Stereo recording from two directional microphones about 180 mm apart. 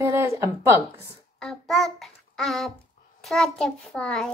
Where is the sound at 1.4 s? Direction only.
5° left (ahead or behind).